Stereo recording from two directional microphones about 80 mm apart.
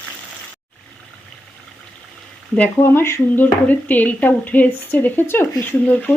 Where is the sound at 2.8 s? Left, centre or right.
Left; by 6.1 s centre.